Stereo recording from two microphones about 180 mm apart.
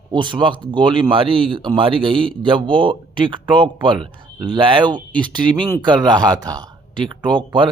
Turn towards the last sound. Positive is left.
turn(degrees=-25)  # may be behind; listen again after turning